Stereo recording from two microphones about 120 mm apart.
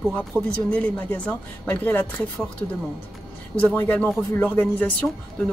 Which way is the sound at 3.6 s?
10° left (ahead or behind).